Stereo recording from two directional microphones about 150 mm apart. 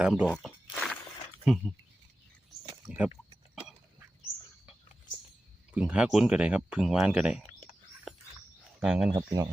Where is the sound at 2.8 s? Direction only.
10° right (ahead or behind).